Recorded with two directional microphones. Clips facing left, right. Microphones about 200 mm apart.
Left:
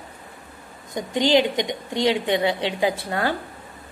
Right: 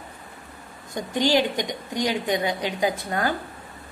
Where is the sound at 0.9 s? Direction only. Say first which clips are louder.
Left 2 dB; 20° left (ahead or behind).